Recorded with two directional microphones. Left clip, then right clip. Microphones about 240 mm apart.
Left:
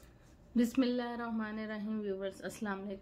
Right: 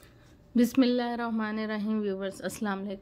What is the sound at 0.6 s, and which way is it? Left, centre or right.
Speech, right.